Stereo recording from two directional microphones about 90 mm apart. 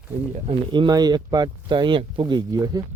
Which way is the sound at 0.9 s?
45° right (ahead or behind).